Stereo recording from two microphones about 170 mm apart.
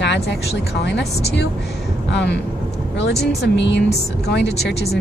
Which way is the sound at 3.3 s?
85° left.